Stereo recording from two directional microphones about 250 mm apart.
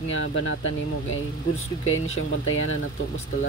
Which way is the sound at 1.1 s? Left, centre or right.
Left.